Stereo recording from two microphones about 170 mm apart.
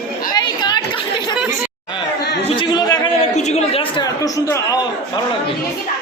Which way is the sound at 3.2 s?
40° left (ahead or behind).